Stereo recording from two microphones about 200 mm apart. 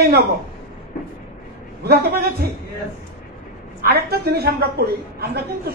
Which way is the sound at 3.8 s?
50° right (ahead or behind).